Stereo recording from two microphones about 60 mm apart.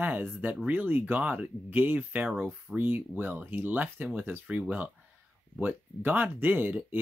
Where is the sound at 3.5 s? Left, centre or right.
Right.